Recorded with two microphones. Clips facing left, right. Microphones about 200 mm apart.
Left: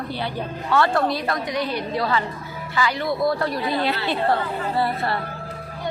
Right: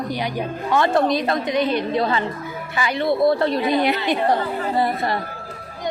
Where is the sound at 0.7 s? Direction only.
20° right (ahead or behind).